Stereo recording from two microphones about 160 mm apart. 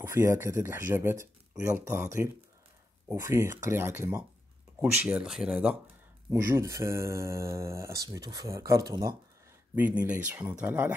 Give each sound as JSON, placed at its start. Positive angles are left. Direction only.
{"t": 0.0, "sound": "speech", "side_deg": -15}
{"t": 6.3, "sound": "speech", "side_deg": -20}
{"t": 9.8, "sound": "speech", "side_deg": -10}